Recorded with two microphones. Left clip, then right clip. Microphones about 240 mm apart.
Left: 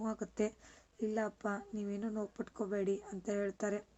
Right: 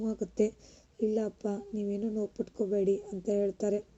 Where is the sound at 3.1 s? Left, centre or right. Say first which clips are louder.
Right 7 dB; centre.